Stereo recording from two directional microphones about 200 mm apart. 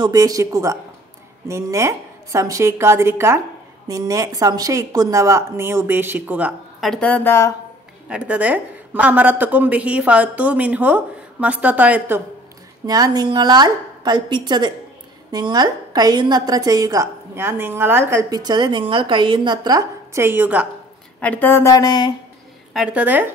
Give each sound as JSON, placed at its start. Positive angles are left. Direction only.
{"t": 0.0, "sound": "a woman's voice", "side_deg": -15}
{"t": 8.1, "sound": "a woman's voice", "side_deg": -5}
{"t": 12.8, "sound": "a woman's voice", "side_deg": -20}
{"t": 21.2, "sound": "speech", "side_deg": 10}
{"t": 22.7, "sound": "a woman's voice", "side_deg": -5}